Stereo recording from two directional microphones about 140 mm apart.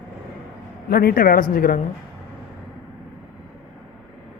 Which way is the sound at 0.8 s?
90° left.